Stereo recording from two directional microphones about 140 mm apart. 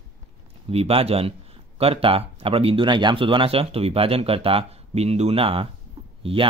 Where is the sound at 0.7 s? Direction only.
45° right (ahead or behind).